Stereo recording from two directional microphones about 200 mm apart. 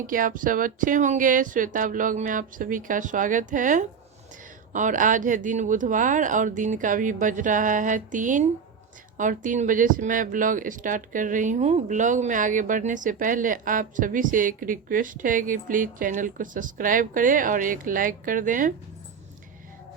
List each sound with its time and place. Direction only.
0.1 s speech: 40° right (ahead or behind)